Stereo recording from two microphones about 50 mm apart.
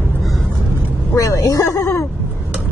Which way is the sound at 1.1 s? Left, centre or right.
Left.